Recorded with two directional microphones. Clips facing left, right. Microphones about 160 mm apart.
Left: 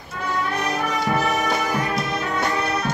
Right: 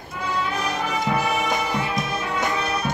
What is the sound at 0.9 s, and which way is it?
Music, 10° right (ahead or behind).